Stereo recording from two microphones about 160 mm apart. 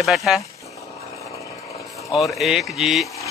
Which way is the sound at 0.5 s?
20° left (ahead or behind).